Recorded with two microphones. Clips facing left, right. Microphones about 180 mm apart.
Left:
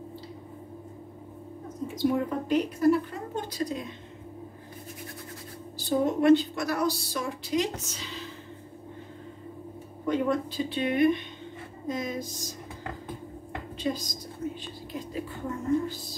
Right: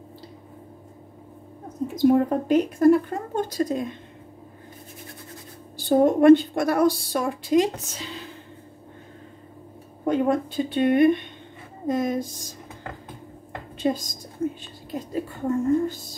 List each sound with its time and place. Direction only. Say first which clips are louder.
2.0 s a woman's voice: right 8 dB; 45° right (ahead or behind)
5.9 s a woman's voice: right 7 dB; 50° right (ahead or behind)
10.0 s a woman's voice: right 5 dB; 50° right (ahead or behind)
14.9 s a woman's voice: right 6 dB; 40° right (ahead or behind)